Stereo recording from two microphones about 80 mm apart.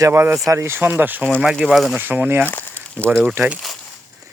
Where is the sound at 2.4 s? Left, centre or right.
Left.